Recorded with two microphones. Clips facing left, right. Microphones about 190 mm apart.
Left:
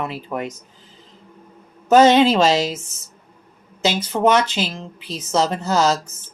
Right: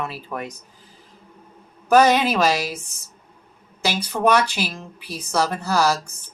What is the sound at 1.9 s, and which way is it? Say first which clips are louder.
Speech: left 4 dB; 25° left (ahead or behind).